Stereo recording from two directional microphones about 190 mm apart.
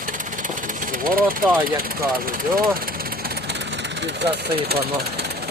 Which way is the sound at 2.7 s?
50° right (ahead or behind).